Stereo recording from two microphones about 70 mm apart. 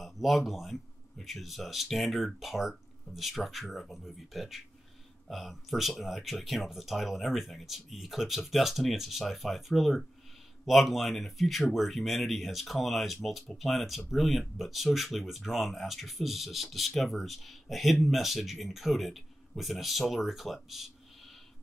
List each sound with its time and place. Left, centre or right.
0.0 s speech: centre